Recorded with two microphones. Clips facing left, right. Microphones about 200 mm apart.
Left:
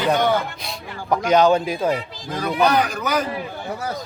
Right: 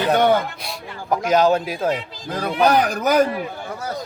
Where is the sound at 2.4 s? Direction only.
45° right (ahead or behind).